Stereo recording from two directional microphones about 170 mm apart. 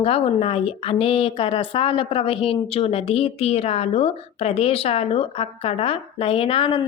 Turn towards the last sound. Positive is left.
turn(degrees=35)  # may be behind; listen again after turning